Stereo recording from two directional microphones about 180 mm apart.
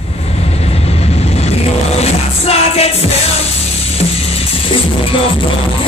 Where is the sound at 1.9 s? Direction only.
35° left (ahead or behind).